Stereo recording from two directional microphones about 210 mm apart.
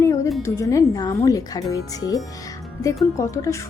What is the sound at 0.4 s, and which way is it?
A woman's voice, 15° left (ahead or behind).